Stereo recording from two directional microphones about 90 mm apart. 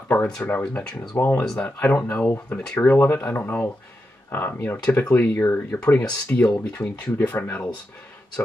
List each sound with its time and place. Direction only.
0.1 s speech: 20° left (ahead or behind)
1.1 s speech: 30° left (ahead or behind)